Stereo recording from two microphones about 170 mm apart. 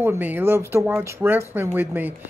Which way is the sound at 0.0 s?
10° right (ahead or behind).